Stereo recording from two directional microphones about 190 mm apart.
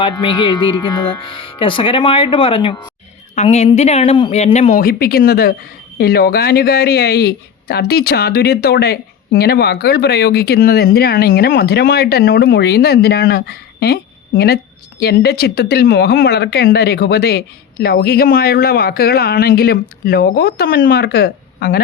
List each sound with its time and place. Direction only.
0.0 s speech: 25° left (ahead or behind)
3.3 s speech: 35° left (ahead or behind)
4.8 s speech: 50° left (ahead or behind)